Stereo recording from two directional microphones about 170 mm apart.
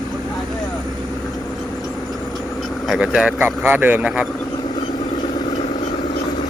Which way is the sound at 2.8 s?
5° right (ahead or behind).